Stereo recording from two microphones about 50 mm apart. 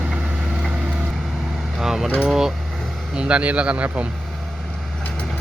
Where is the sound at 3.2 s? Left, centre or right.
Right.